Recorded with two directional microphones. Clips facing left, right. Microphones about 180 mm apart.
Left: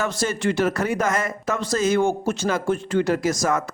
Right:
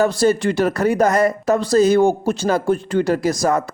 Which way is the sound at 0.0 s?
35° right (ahead or behind).